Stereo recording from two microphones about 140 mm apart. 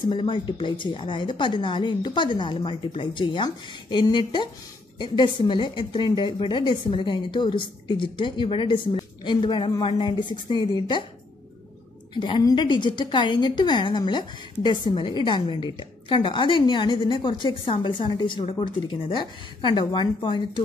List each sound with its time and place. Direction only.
0.1 s a woman's voice: 35° left (ahead or behind)
12.1 s a woman's voice: 35° left (ahead or behind)